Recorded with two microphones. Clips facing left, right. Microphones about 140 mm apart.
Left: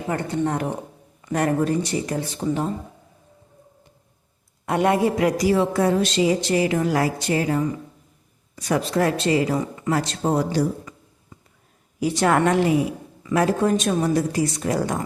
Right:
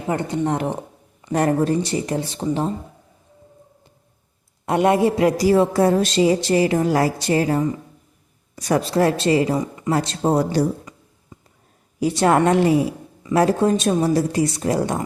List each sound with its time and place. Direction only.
0.1 s a woman's voice: 20° right (ahead or behind)
4.6 s a woman's voice: 25° right (ahead or behind); by 10.7 s 40° right (ahead or behind)
11.9 s a woman's voice: 30° right (ahead or behind)